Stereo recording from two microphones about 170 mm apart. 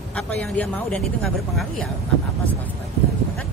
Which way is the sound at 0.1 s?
5° left (ahead or behind).